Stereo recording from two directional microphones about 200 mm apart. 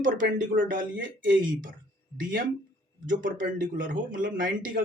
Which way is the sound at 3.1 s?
40° right (ahead or behind).